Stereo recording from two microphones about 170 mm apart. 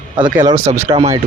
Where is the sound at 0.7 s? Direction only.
35° right (ahead or behind).